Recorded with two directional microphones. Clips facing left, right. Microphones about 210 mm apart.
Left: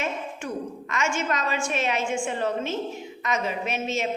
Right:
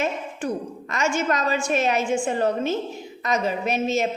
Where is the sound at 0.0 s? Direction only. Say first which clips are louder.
Right 4 dB; 35° right (ahead or behind).